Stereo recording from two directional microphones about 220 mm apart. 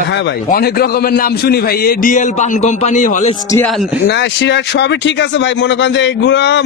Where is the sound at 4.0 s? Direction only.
50° left (ahead or behind).